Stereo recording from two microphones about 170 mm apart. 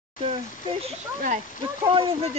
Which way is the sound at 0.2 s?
35° right (ahead or behind).